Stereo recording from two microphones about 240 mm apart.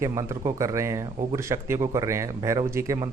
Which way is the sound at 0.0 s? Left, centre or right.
Centre.